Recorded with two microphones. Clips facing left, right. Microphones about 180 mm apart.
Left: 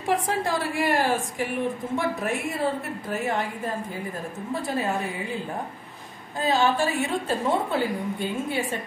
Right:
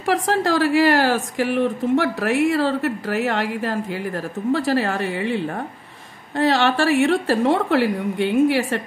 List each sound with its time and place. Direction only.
0.0 s a woman's voice: 90° right